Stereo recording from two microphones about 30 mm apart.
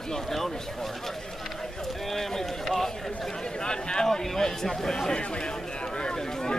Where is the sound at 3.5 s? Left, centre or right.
Left.